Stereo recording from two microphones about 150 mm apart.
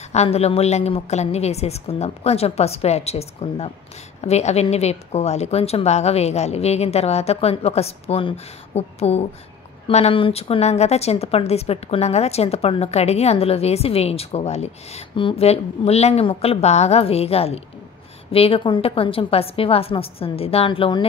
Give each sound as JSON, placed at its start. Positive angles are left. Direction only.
{"t": 0.1, "sound": "a woman's voice", "side_deg": 45}